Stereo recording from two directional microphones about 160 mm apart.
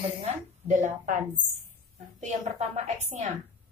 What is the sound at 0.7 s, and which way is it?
A woman's voice, 50° right (ahead or behind).